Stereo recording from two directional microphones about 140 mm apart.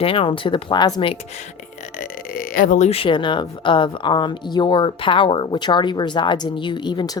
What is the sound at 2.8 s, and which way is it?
Speech, 40° left (ahead or behind).